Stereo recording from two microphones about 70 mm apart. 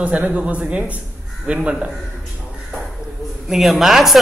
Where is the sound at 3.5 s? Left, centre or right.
Centre.